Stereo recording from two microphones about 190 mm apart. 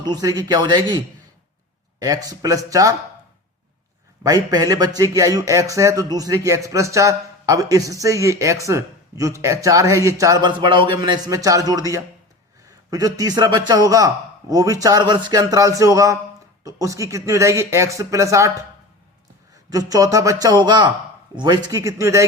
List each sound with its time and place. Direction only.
0.0 s a man's voice: 20° right (ahead or behind)
4.2 s a man's voice: 20° right (ahead or behind)
19.7 s a man's voice: 20° right (ahead or behind)